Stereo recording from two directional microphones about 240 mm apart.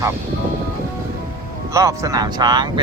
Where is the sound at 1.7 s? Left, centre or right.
Centre.